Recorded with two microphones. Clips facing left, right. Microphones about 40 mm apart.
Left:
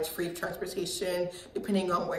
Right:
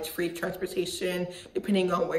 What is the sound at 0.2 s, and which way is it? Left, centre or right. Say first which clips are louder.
Speech: right 3 dB; right.